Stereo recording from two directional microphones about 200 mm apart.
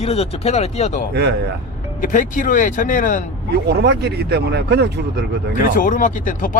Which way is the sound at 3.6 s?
55° right (ahead or behind).